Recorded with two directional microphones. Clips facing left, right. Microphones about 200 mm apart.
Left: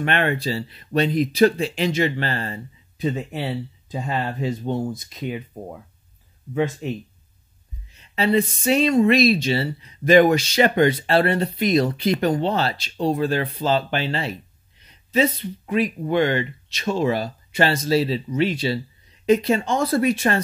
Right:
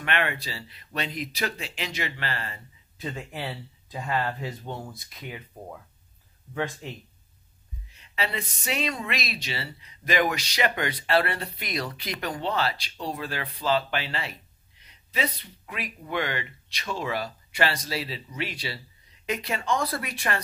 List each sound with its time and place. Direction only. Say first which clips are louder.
0.0 s speech: left 7 dB; 35° left (ahead or behind)
3.0 s speech: left 9 dB; 20° left (ahead or behind)
8.2 s speech: left 12 dB; 30° left (ahead or behind)